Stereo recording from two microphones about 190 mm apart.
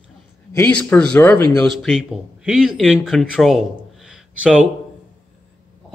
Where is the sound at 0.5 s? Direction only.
5° left (ahead or behind).